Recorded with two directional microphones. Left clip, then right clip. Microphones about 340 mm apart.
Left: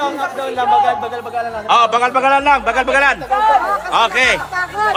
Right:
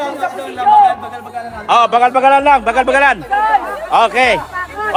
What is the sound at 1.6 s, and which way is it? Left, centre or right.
A man's voice, centre.